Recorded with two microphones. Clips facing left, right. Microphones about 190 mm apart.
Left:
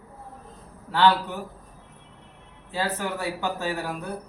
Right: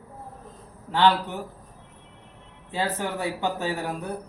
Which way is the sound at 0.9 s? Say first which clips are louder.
Even; 15° right (ahead or behind).